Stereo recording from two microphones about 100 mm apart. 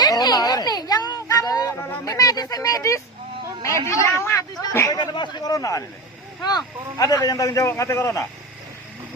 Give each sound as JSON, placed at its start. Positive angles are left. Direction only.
{"t": 0.0, "sound": "children playing", "side_deg": 40}
{"t": 2.0, "sound": "a man's voice", "side_deg": 35}
{"t": 4.9, "sound": "a man's voice", "side_deg": 50}